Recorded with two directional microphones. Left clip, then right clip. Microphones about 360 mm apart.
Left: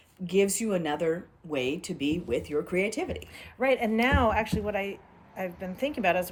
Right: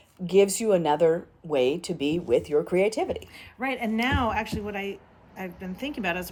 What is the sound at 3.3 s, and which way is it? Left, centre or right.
Speech, centre.